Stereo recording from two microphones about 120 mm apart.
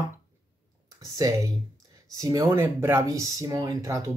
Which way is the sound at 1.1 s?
30° right (ahead or behind).